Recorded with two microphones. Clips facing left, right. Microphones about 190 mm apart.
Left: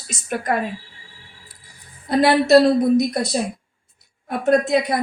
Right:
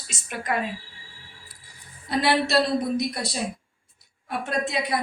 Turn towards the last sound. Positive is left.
turn(degrees=45)  # may be behind; listen again after turning